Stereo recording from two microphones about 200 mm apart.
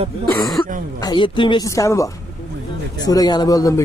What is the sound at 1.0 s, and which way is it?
A woman's voice, 25° left (ahead or behind).